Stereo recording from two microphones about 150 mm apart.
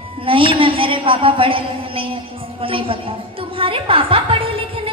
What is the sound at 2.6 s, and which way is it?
A woman's voice, 40° right (ahead or behind).